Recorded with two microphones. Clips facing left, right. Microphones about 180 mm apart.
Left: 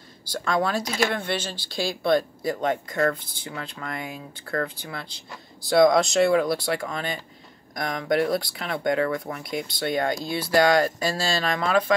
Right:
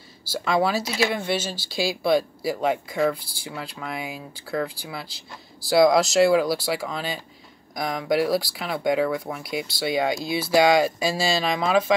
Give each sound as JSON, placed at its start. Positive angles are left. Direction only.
{"t": 0.2, "sound": "speech", "side_deg": -5}